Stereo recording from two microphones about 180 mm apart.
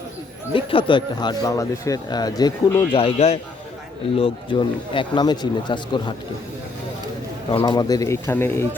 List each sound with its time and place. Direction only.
0.5 s speech: 30° left (ahead or behind)
7.6 s speech: 20° left (ahead or behind)